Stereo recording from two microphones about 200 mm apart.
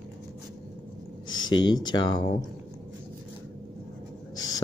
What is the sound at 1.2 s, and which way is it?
Speech, 20° left (ahead or behind).